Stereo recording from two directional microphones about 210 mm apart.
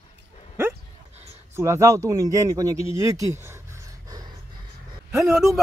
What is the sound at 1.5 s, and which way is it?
Speech, 15° right (ahead or behind).